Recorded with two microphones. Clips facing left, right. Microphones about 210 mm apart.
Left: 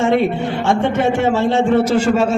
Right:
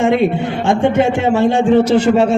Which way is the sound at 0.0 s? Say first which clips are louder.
Right 2 dB; 15° right (ahead or behind).